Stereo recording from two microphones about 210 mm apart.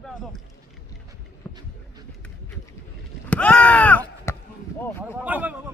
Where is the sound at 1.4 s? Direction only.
5° left (ahead or behind).